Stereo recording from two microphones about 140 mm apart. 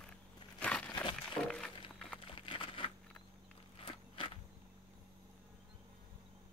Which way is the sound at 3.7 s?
40° left (ahead or behind).